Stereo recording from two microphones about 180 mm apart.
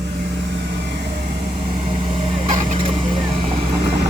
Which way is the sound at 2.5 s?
40° right (ahead or behind).